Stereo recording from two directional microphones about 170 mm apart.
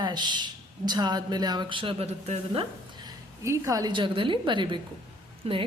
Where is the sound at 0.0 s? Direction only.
25° right (ahead or behind).